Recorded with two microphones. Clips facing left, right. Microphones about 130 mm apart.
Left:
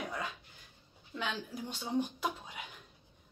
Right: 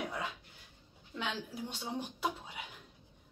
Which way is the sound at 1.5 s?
30° right (ahead or behind).